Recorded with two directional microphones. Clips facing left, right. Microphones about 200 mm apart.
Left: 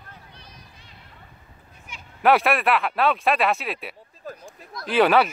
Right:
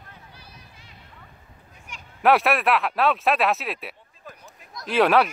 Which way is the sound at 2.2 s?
Centre (ahead or behind).